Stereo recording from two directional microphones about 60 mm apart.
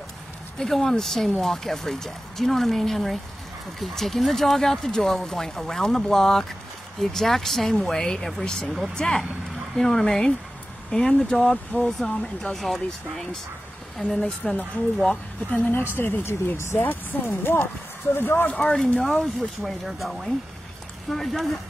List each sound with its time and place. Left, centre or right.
0.6 s speech: centre
11.7 s speech: left
12.5 s speech: centre
15.5 s speech: left
18.6 s speech: centre
19.0 s speech: centre